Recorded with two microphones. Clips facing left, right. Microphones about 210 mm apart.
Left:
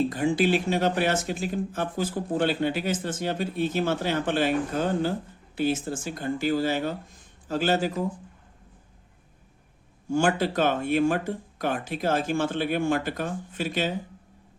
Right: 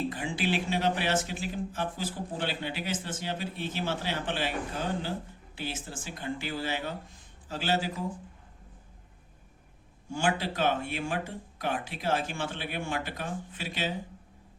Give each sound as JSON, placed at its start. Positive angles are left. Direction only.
{"t": 0.1, "sound": "speech", "side_deg": 45}
{"t": 10.1, "sound": "speech", "side_deg": 45}